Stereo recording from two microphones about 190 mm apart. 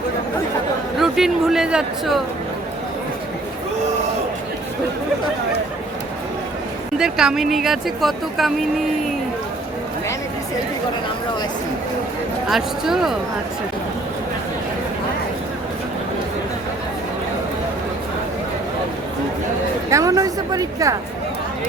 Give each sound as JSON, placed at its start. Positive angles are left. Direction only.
{"t": 0.9, "sound": "speech", "side_deg": 0}
{"t": 7.0, "sound": "speech", "side_deg": 0}
{"t": 12.5, "sound": "speech", "side_deg": 0}
{"t": 19.9, "sound": "a woman's voice", "side_deg": -15}